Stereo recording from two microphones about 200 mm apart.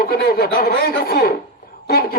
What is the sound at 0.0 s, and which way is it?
Speech, 50° left (ahead or behind).